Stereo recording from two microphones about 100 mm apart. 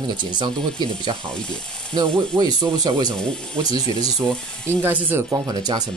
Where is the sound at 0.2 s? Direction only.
50° right (ahead or behind).